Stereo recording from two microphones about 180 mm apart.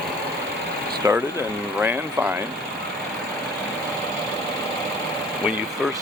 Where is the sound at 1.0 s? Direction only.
20° right (ahead or behind).